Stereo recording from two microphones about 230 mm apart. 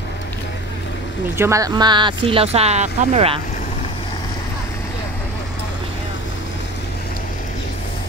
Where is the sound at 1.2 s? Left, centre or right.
Centre; by 3.3 s right.